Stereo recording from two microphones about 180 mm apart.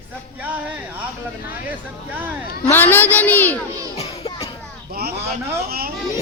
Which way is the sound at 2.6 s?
10° left (ahead or behind).